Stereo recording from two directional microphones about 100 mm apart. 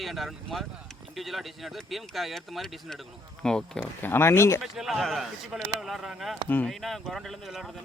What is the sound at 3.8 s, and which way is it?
Speech, 20° left (ahead or behind).